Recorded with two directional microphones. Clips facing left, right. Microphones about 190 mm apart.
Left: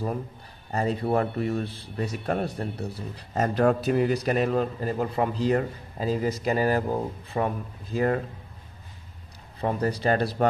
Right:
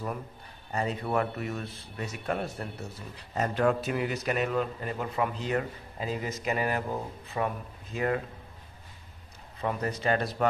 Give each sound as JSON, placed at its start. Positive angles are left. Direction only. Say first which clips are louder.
{"t": 0.7, "sound": "a man's voice", "louder": "left 5 dB", "side_deg": 35}
{"t": 9.6, "sound": "a man's voice", "louder": "left 5 dB", "side_deg": 35}